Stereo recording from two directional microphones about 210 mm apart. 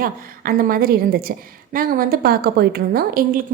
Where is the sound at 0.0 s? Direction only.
45° right (ahead or behind).